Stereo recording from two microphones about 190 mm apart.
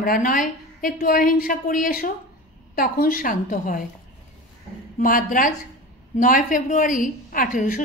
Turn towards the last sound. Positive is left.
turn(degrees=45)  # may be behind; listen again after turning